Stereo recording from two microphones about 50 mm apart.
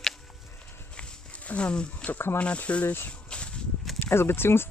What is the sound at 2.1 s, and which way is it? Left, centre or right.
Speech, left.